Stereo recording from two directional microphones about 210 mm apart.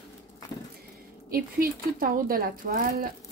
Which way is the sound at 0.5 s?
20° left (ahead or behind).